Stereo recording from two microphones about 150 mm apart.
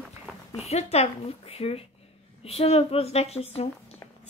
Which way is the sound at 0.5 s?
45° left (ahead or behind).